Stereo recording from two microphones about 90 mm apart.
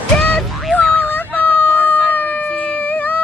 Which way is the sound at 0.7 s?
15° left (ahead or behind).